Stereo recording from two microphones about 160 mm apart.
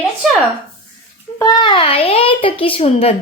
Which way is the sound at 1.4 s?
25° left (ahead or behind).